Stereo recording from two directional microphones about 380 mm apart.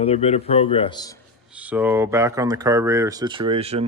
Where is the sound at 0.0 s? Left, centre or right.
Centre.